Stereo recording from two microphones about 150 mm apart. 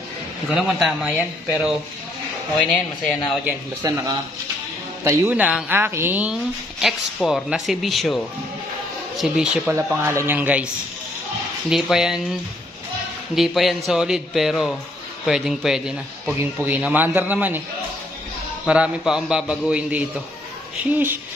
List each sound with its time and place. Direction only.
0.5 s speech: 5° right (ahead or behind)
3.8 s a man's voice: 20° right (ahead or behind); by 9.8 s 5° right (ahead or behind)
9.8 s a man's voice: 15° right (ahead or behind)
11.7 s speech: 5° right (ahead or behind)
13.3 s a man's voice: centre (ahead or behind)
18.7 s a man's voice: 5° right (ahead or behind)